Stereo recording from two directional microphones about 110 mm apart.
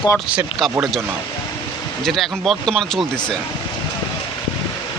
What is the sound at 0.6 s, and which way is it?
Speech, centre (ahead or behind).